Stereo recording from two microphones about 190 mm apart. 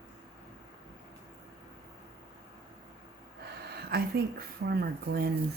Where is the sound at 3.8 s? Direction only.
55° right (ahead or behind).